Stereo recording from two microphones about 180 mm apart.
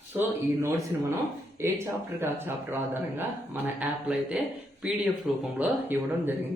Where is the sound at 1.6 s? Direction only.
15° right (ahead or behind).